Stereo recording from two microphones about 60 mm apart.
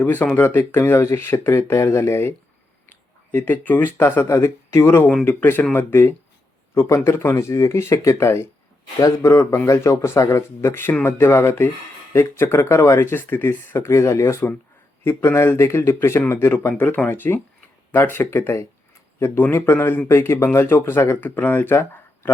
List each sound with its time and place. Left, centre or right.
0.0 s speech: left
3.3 s speech: left
4.3 s speech: left
5.2 s speech: left
5.7 s speech: left
6.7 s speech: left
9.0 s speech: left